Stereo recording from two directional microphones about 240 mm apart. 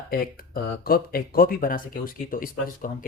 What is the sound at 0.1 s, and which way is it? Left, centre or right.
Speech, left.